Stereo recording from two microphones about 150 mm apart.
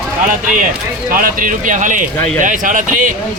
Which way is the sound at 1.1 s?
70° right (ahead or behind).